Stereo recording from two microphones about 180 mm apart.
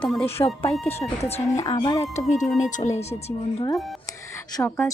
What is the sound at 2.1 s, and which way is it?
A woman's voice, 40° left (ahead or behind).